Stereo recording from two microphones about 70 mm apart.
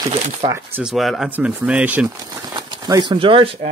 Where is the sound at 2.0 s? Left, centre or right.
Right.